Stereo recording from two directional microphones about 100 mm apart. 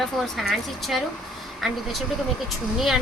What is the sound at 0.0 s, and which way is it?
Speech, centre (ahead or behind).